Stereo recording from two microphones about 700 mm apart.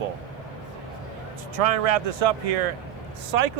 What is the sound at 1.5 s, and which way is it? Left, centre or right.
Speech, right.